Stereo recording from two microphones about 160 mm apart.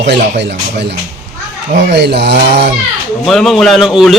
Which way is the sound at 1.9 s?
90° right.